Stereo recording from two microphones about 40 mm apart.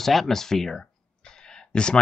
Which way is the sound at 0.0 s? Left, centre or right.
Centre.